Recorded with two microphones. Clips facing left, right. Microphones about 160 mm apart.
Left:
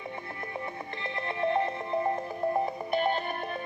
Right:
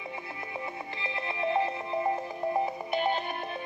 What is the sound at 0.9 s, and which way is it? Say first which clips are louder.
Music: left 2 dB; 5° right (ahead or behind).